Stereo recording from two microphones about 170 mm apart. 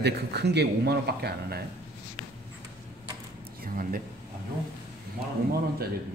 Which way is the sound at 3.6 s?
55° right (ahead or behind).